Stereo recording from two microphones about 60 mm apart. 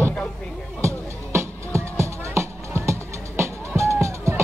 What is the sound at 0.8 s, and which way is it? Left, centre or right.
Music, right.